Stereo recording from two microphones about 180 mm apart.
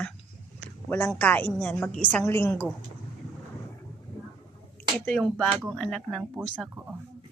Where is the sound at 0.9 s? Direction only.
10° left (ahead or behind).